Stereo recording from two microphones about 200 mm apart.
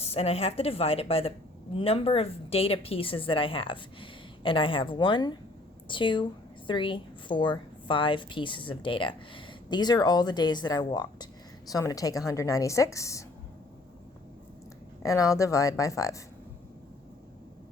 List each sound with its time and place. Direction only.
0.0 s a woman's voice: 30° left (ahead or behind); by 13.2 s 15° left (ahead or behind)
15.0 s a woman's voice: 15° left (ahead or behind)